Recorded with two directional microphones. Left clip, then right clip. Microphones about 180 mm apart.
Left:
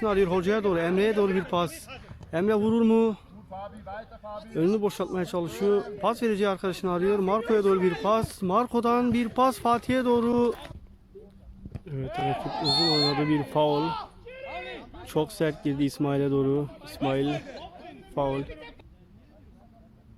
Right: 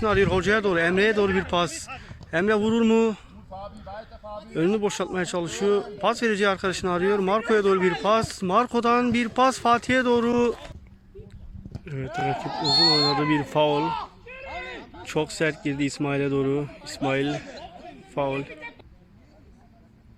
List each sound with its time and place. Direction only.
0.0 s speech: centre (ahead or behind)
3.5 s speech: 25° right (ahead or behind)
4.5 s speech: centre (ahead or behind)
11.7 s speech: 5° left (ahead or behind)
14.0 s a sound: 45° left (ahead or behind)
14.5 s a sound: centre (ahead or behind)
15.0 s speech: 15° left (ahead or behind)
17.2 s speech: centre (ahead or behind)
18.2 s speech: 15° left (ahead or behind)